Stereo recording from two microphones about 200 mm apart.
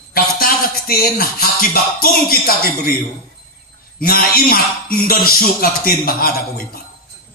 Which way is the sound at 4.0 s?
50° left (ahead or behind).